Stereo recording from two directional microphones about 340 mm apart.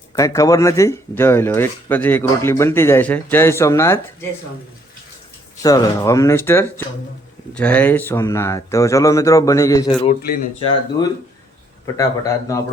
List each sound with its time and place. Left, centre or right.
0.2 s speech: centre
5.6 s speech: centre
10.1 s speech: left
11.9 s speech: centre